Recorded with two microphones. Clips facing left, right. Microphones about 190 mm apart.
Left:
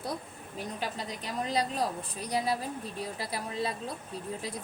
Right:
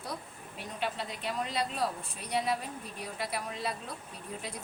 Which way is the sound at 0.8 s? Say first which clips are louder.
Right 5 dB; 40° left (ahead or behind).